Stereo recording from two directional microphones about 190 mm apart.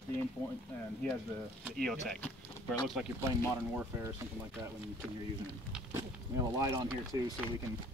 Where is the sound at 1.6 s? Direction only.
5° left (ahead or behind).